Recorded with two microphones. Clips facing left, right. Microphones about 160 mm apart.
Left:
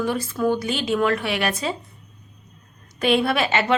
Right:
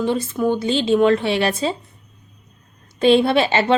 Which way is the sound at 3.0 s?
25° right (ahead or behind).